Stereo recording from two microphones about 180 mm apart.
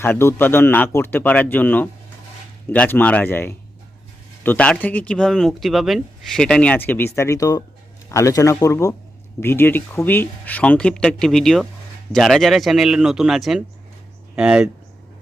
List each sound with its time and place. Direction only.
0.0 s speech: 15° left (ahead or behind); by 14.7 s 5° right (ahead or behind)